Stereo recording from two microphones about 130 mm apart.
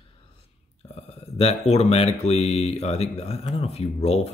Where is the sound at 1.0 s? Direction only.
50° left (ahead or behind).